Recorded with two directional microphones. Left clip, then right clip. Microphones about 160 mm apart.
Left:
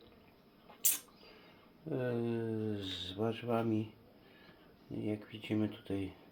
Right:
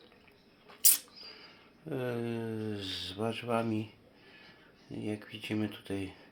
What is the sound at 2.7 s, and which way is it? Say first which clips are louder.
Speech: right 3 dB; 40° right (ahead or behind).